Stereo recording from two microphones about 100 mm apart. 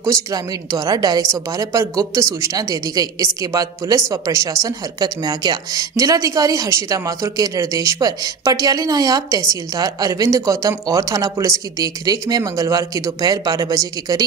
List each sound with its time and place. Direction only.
0.0 s speech: 35° right (ahead or behind)